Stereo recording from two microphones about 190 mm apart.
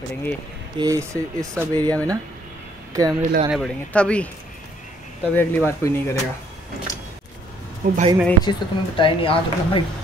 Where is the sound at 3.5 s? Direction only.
Centre (ahead or behind).